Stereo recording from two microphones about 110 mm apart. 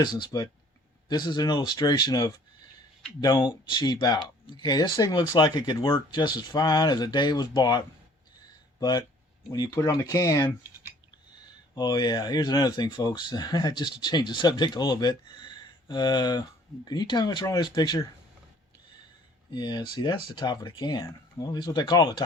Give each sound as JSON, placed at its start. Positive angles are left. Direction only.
{"t": 0.0, "sound": "speech", "side_deg": 45}
{"t": 8.8, "sound": "speech", "side_deg": 40}
{"t": 11.7, "sound": "speech", "side_deg": 40}
{"t": 19.5, "sound": "speech", "side_deg": 40}